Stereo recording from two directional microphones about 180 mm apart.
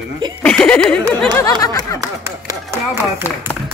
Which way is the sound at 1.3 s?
20° left (ahead or behind).